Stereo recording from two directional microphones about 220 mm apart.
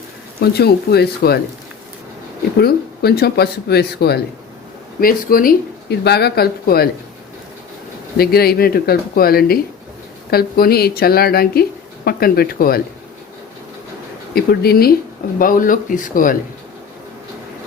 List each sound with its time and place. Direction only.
0.3 s speech: 45° left (ahead or behind)
2.6 s speech: 45° left (ahead or behind)
8.2 s speech: 45° left (ahead or behind)
14.3 s speech: 45° left (ahead or behind)